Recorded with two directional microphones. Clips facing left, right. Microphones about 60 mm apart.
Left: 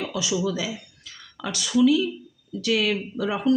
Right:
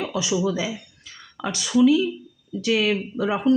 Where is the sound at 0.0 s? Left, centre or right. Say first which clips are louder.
Right 2 dB; right.